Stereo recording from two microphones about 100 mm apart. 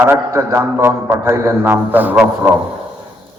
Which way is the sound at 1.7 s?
15° right (ahead or behind).